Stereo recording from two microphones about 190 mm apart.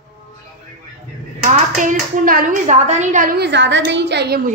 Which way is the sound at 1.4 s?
45° right (ahead or behind).